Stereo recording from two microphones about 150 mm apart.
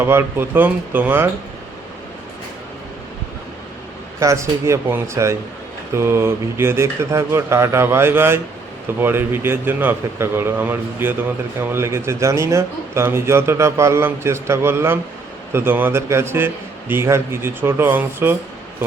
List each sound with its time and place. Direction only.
0.0 s a man's voice: 15° right (ahead or behind)
4.2 s a man's voice: 20° right (ahead or behind)